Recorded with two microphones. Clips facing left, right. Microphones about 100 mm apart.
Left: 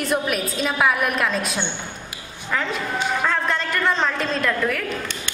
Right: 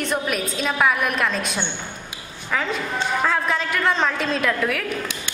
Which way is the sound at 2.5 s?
Centre (ahead or behind).